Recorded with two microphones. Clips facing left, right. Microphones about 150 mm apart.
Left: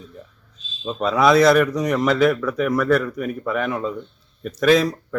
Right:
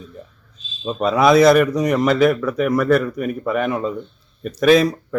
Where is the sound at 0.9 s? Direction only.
10° right (ahead or behind).